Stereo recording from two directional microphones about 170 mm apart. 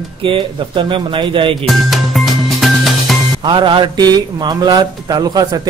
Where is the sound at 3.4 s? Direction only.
30° right (ahead or behind).